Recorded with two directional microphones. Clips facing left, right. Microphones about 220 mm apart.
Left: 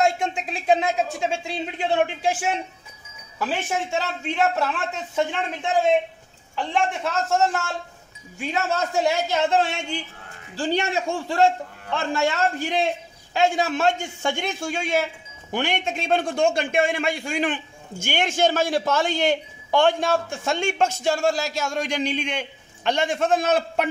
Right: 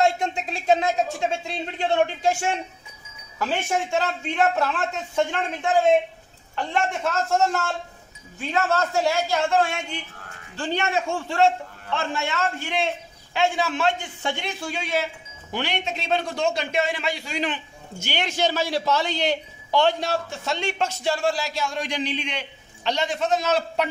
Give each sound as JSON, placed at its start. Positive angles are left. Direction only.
{"t": 0.0, "sound": "a man's voice", "side_deg": 5}
{"t": 3.3, "sound": "a man's voice", "side_deg": 5}
{"t": 6.5, "sound": "a man's voice", "side_deg": 0}
{"t": 12.0, "sound": "a man's voice", "side_deg": 40}